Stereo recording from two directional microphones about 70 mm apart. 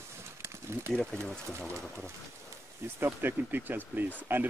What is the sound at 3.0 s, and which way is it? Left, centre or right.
Speech, right.